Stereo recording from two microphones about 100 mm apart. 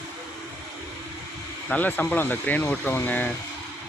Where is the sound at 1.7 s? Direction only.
15° left (ahead or behind).